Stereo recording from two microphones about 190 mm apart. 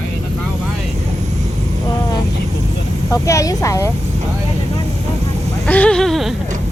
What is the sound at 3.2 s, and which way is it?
Speech, 15° left (ahead or behind).